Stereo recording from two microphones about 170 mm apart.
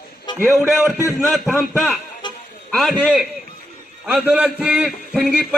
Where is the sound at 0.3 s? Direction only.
25° left (ahead or behind).